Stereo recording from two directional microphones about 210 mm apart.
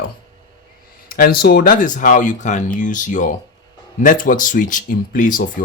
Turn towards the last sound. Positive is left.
turn(degrees=40)  # may be behind; listen again after turning